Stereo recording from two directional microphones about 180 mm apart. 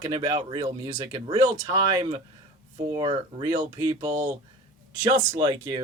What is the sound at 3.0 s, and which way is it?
A man's voice, 25° right (ahead or behind).